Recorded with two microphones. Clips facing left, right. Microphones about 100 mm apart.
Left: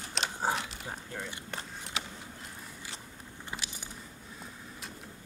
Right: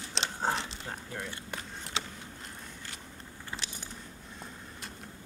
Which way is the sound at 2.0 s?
25° right (ahead or behind).